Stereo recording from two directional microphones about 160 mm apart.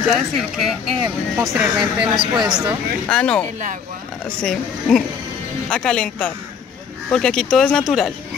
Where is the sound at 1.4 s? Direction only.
20° right (ahead or behind).